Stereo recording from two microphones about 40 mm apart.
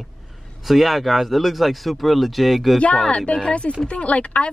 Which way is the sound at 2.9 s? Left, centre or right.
Centre.